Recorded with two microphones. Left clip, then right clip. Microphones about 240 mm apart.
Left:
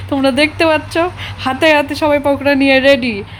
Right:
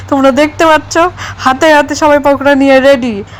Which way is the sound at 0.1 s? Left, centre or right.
Centre.